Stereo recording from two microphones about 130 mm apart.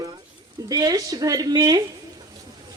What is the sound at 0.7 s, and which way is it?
Speech, 30° right (ahead or behind).